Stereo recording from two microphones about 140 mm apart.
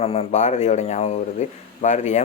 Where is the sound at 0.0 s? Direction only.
45° left (ahead or behind).